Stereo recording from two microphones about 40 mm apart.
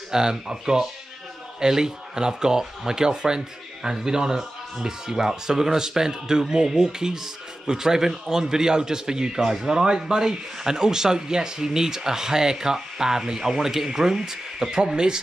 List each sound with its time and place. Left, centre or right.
0.1 s speech: centre